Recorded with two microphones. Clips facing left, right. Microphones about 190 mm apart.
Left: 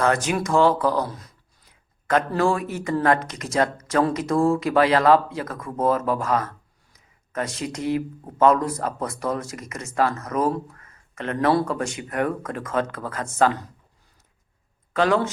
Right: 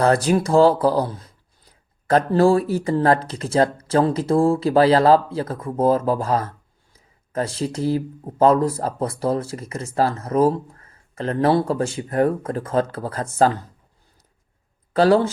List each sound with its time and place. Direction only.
0.0 s speech: 35° right (ahead or behind)
6.9 s a sound: 30° right (ahead or behind)
8.4 s speech: 30° right (ahead or behind)
14.9 s speech: 35° right (ahead or behind)